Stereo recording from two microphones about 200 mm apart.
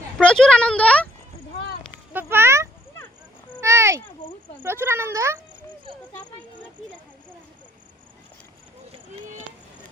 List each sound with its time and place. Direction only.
0.2 s speech: 5° left (ahead or behind)
2.1 s a sound: 10° right (ahead or behind)
4.6 s speech: 10° right (ahead or behind)